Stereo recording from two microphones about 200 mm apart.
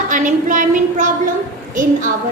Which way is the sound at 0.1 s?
40° right (ahead or behind).